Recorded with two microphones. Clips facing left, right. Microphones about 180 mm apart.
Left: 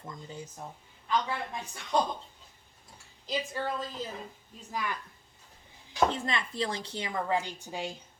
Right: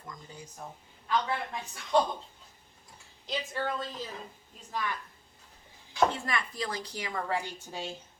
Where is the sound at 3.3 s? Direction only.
Centre (ahead or behind).